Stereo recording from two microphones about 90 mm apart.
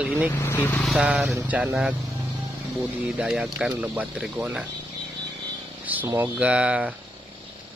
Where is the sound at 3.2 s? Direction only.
10° right (ahead or behind).